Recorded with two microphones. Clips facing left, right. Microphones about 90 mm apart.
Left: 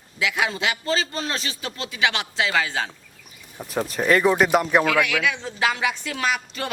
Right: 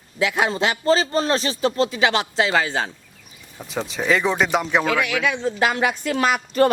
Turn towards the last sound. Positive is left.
turn(degrees=-45)  # may be behind; listen again after turning